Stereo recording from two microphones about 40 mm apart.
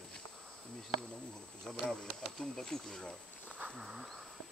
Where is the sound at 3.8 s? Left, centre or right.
Centre.